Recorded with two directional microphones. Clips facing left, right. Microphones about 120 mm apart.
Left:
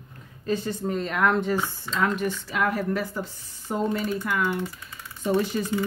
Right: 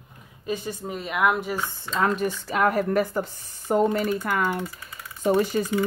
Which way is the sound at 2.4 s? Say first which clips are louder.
Right 5 dB; 45° right (ahead or behind).